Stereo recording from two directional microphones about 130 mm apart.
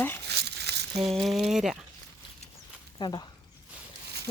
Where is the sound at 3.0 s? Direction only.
35° left (ahead or behind).